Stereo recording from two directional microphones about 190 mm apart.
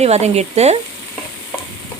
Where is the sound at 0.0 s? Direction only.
35° right (ahead or behind).